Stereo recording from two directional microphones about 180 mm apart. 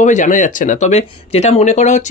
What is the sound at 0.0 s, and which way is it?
Speech, 45° left (ahead or behind).